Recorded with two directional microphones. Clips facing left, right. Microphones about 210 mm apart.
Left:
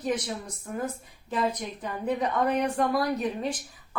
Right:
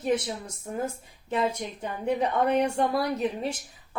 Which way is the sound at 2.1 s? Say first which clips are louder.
Right 2 dB; 25° right (ahead or behind).